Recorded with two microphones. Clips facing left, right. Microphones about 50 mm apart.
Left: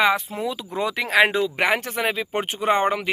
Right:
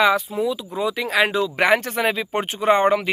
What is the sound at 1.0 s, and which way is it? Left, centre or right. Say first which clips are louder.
Speech: left 2 dB; left.